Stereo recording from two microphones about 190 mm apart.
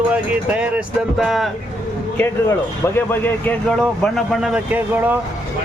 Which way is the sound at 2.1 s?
10° left (ahead or behind).